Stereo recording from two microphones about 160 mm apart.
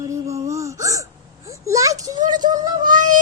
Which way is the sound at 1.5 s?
20° right (ahead or behind).